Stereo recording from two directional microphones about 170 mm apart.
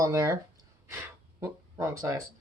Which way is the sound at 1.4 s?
15° right (ahead or behind).